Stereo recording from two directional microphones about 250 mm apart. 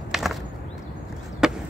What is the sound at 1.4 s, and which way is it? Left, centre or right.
Chop, centre.